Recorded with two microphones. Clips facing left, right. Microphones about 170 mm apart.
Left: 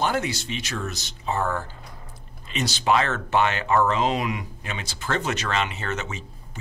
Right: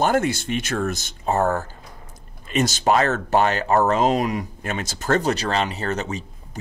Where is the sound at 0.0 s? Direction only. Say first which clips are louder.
Right 5 dB; 50° right (ahead or behind).